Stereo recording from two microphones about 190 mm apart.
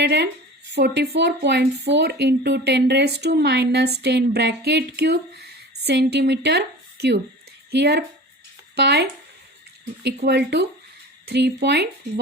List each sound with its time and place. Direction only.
0.0 s a woman's voice: 65° right (ahead or behind)
7.7 s speech: 60° right (ahead or behind)
10.2 s speech: 60° right (ahead or behind)